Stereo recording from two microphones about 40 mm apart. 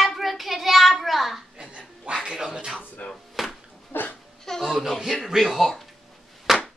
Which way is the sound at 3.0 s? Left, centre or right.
Left.